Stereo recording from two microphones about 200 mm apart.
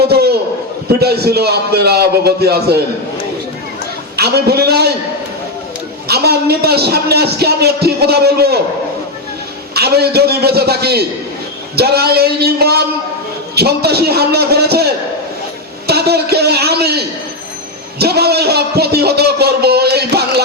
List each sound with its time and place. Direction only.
0.1 s a man's voice: 55° right (ahead or behind)
4.2 s a man's voice: 55° right (ahead or behind)
6.1 s a man's voice: 55° right (ahead or behind)
9.7 s a man's voice: 55° right (ahead or behind)
15.9 s a man's voice: 55° right (ahead or behind)
18.0 s a man's voice: 55° right (ahead or behind)